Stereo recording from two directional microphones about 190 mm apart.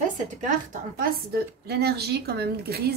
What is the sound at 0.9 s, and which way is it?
Speech, 50° right (ahead or behind).